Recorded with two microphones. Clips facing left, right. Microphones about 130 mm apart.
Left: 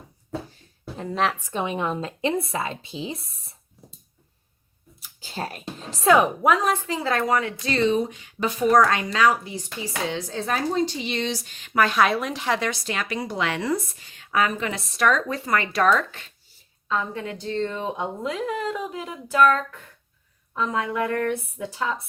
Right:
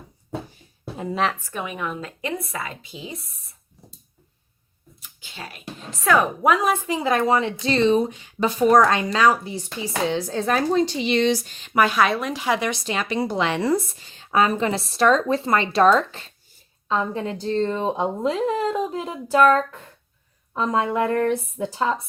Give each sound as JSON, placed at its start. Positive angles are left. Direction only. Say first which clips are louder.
{"t": 0.3, "sound": "a sound", "louder": "right 1 dB", "side_deg": -10}
{"t": 1.4, "sound": "a woman's voice", "louder": "left 3 dB", "side_deg": 20}
{"t": 5.2, "sound": "speech", "louder": "left 7 dB", "side_deg": 40}
{"t": 5.6, "sound": "a woman's voice", "louder": "left 3 dB", "side_deg": 25}
{"t": 6.4, "sound": "speech", "louder": "right 1 dB", "side_deg": 0}
{"t": 6.7, "sound": "a woman's voice", "louder": "right 3 dB", "side_deg": -15}
{"t": 10.3, "sound": "speech", "louder": "right 4 dB", "side_deg": -65}
{"t": 11.9, "sound": "speech", "louder": "right 1 dB", "side_deg": 0}
{"t": 12.5, "sound": "speech", "louder": "right 2 dB", "side_deg": -20}